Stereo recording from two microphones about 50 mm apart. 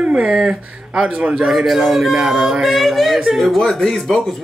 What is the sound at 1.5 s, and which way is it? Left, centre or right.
Speech, centre.